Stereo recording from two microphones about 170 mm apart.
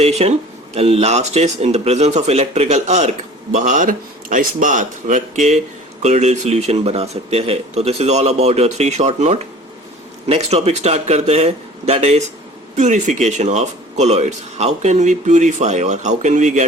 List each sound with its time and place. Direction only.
0.0 s speech: 40° right (ahead or behind)